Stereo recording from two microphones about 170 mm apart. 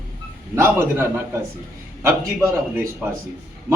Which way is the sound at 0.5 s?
15° right (ahead or behind).